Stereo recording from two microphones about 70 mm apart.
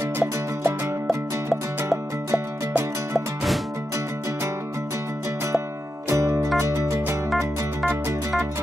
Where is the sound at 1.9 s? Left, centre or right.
Right.